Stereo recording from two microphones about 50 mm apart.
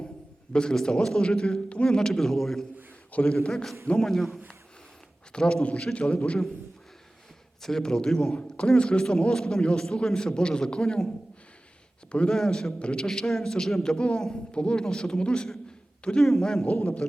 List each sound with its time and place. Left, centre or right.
0.5 s a man's voice: centre
3.1 s a man's voice: left
3.5 s a man's voice: centre
5.3 s a man's voice: centre
7.6 s a man's voice: centre
12.1 s a man's voice: centre